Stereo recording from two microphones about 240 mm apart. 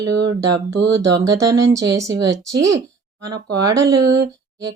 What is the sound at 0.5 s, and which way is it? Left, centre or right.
Speech, right.